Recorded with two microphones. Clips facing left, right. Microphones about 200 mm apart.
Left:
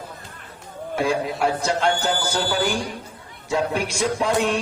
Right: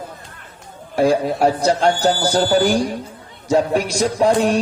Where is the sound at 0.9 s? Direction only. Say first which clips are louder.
Right 7 dB; 40° right (ahead or behind).